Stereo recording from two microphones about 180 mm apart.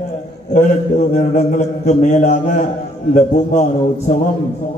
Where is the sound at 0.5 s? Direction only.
40° left (ahead or behind).